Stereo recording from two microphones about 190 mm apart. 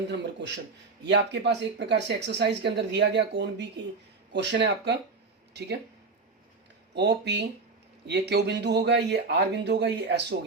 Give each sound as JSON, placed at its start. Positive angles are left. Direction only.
{"t": 0.1, "sound": "speech", "side_deg": -65}
{"t": 6.9, "sound": "speech", "side_deg": -65}